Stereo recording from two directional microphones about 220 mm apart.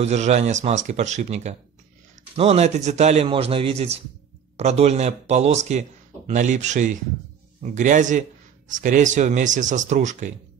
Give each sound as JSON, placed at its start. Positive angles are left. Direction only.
{"t": 0.0, "sound": "a man's voice", "side_deg": -30}